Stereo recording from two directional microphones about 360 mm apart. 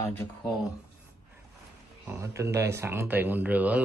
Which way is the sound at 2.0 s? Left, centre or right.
Centre.